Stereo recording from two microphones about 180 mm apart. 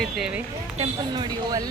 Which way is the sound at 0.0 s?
5° right (ahead or behind).